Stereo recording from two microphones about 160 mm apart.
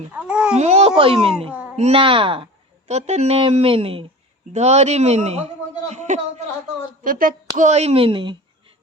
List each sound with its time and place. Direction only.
0.1 s babbling: 5° right (ahead or behind)
0.6 s a child's voice: 40° right (ahead or behind)
7.0 s speech: 60° right (ahead or behind); by 8.4 s 30° right (ahead or behind)